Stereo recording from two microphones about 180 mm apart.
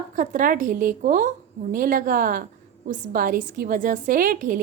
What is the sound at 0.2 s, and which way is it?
A woman's voice, 50° right (ahead or behind).